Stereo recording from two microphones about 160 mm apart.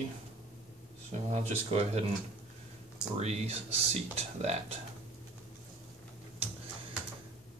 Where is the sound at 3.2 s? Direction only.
40° right (ahead or behind).